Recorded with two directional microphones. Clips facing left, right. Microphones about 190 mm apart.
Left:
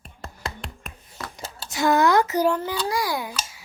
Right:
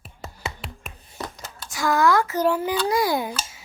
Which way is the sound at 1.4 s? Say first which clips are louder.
Left 4 dB; 25° left (ahead or behind).